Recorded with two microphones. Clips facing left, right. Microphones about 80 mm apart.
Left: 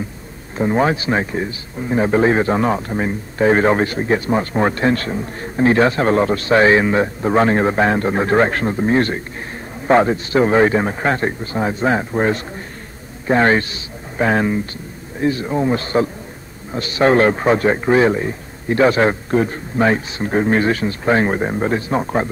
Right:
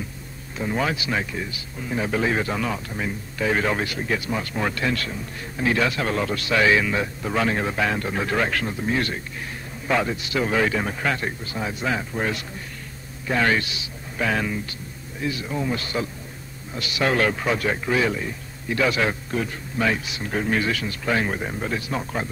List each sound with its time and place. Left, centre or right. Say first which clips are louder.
0.6 s a man's voice: left 8 dB; left